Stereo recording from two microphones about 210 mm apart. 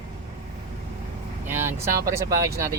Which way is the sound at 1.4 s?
10° right (ahead or behind).